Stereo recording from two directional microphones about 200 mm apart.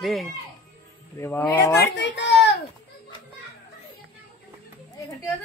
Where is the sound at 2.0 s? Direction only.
60° left (ahead or behind).